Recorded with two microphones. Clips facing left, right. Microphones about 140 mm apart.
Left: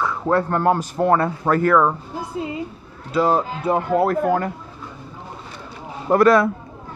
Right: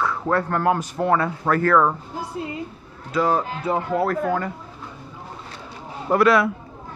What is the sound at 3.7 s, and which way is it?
Speech, 45° left (ahead or behind).